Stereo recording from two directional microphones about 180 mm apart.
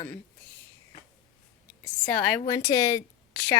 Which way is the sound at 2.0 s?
15° left (ahead or behind).